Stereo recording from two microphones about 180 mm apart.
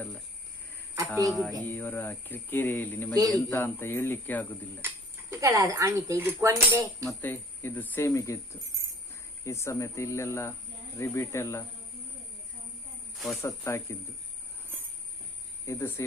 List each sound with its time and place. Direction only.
1.3 s music: centre (ahead or behind)
1.6 s speech: 10° left (ahead or behind)
5.3 s speech: 15° right (ahead or behind)
7.0 s speech: 10° left (ahead or behind)
9.4 s speech: 15° left (ahead or behind)
13.1 s speech: centre (ahead or behind)
13.4 s speech: 15° left (ahead or behind)
15.6 s speech: 15° left (ahead or behind)